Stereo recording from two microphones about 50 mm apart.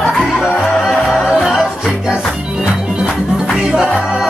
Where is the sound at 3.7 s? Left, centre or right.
Centre.